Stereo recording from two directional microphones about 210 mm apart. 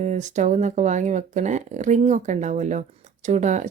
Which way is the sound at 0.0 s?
35° right (ahead or behind).